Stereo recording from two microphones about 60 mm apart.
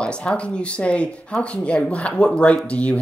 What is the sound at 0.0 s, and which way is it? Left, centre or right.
Speech, centre.